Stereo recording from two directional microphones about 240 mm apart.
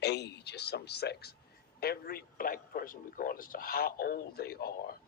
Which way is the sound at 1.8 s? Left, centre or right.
Left.